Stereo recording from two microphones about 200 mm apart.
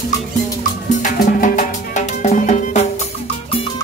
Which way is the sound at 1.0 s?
40° left (ahead or behind).